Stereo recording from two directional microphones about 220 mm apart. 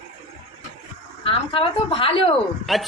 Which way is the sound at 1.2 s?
25° left (ahead or behind).